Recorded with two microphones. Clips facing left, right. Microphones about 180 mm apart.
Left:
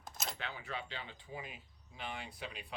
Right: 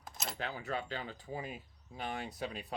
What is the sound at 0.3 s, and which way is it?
Speech, 40° right (ahead or behind).